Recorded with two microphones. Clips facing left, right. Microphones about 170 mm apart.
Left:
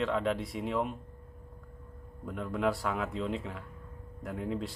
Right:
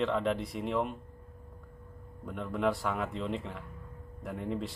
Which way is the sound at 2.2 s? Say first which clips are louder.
Even; centre (ahead or behind).